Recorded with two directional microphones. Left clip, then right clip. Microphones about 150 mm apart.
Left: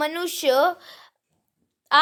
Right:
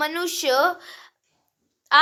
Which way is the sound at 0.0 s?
55° left (ahead or behind).